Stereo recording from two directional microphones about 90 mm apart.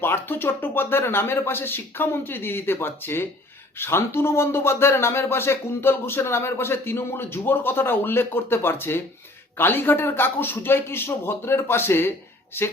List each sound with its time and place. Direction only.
0.0 s speech: 25° left (ahead or behind)